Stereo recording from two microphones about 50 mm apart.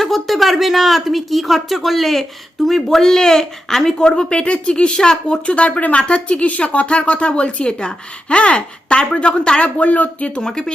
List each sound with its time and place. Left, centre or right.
0.0 s speech: centre; by 10.4 s left
10.4 s speech: centre